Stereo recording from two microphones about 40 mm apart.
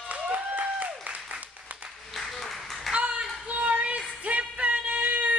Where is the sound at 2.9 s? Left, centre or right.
Right.